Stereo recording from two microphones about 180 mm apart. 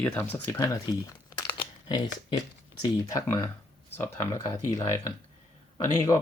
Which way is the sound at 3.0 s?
15° left (ahead or behind).